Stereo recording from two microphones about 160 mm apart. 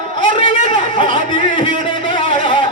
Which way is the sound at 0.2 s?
35° left (ahead or behind).